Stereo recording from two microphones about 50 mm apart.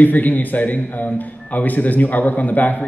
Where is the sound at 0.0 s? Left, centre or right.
Left.